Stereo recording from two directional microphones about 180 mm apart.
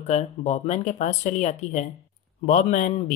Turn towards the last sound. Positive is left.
turn(degrees=40)  # may be behind; listen again after turning